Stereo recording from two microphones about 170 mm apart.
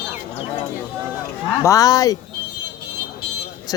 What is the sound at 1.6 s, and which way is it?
Speech, 20° left (ahead or behind).